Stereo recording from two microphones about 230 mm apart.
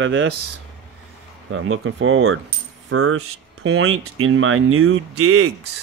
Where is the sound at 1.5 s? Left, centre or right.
Right.